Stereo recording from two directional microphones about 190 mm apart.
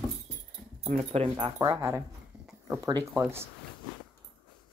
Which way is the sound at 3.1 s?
10° right (ahead or behind).